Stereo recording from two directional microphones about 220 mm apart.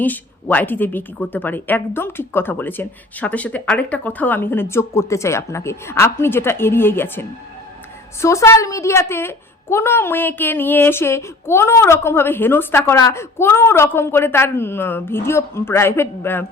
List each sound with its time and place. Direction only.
0.0 s a woman's voice: 10° left (ahead or behind)